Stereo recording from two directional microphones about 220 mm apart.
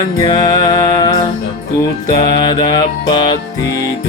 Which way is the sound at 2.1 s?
20° left (ahead or behind).